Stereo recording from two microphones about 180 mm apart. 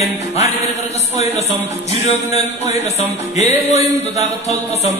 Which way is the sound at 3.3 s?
40° left (ahead or behind).